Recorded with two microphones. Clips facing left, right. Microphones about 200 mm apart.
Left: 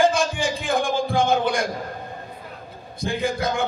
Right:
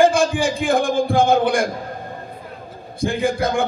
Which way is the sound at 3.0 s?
50° right (ahead or behind).